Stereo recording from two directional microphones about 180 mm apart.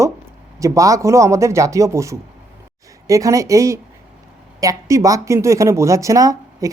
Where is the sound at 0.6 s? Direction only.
20° right (ahead or behind).